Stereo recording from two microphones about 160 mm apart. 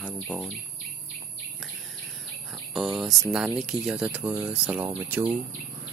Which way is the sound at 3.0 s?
5° right (ahead or behind).